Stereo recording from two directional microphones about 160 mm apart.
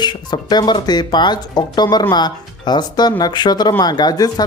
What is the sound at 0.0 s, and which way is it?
Speech, 25° left (ahead or behind).